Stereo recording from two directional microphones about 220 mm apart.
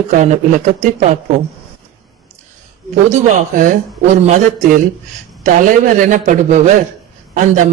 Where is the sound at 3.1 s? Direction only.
35° right (ahead or behind).